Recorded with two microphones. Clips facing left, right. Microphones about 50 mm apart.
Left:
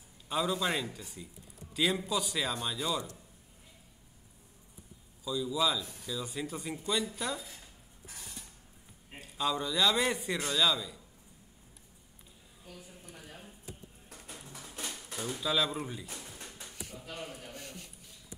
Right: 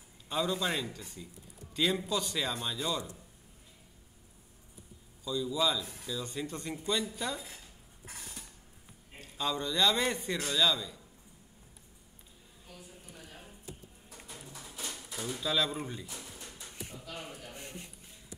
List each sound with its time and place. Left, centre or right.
0.3 s a man's voice: centre
5.2 s a man's voice: centre
9.2 s a man's voice: centre
15.3 s a man's voice: centre
17.0 s a sound: left
17.5 s a sound: right